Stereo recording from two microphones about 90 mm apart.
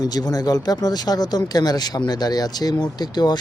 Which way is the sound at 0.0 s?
45° left (ahead or behind).